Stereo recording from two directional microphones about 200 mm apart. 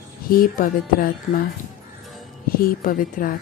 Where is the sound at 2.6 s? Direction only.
45° left (ahead or behind).